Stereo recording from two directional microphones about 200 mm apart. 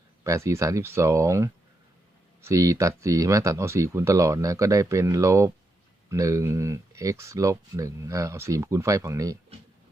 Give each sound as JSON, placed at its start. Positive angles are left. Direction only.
{"t": 0.3, "sound": "speech", "side_deg": -15}